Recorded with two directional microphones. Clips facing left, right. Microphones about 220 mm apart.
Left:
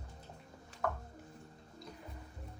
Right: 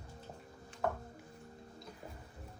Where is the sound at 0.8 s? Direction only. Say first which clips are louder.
Right 2 dB; 20° right (ahead or behind).